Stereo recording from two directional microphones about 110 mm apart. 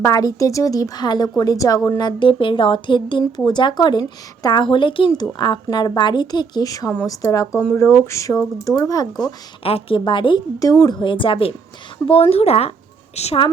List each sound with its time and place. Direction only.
0.0 s a woman's voice: 35° left (ahead or behind)
2.0 s speech: 45° left (ahead or behind)
5.1 s a woman's voice: 35° left (ahead or behind)
9.6 s speech: 60° left (ahead or behind)
10.0 s speech: 50° left (ahead or behind)
10.6 s a woman's voice: 35° left (ahead or behind); by 13.5 s 65° left (ahead or behind)